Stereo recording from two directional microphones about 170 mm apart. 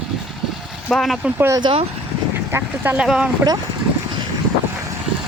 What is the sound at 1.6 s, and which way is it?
Speech, 30° right (ahead or behind).